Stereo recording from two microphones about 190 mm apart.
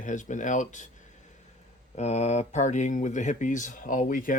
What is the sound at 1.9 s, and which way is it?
Speech, 35° left (ahead or behind).